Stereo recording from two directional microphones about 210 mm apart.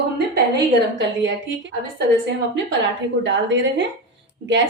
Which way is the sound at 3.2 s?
60° right (ahead or behind).